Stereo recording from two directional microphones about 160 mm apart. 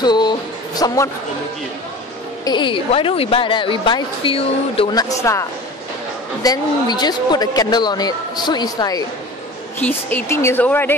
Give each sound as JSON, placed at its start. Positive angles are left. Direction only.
{"t": 0.0, "sound": "music", "side_deg": 25}
{"t": 2.4, "sound": "a woman's voice", "side_deg": 30}
{"t": 4.9, "sound": "speech", "side_deg": 20}
{"t": 9.8, "sound": "speech", "side_deg": 10}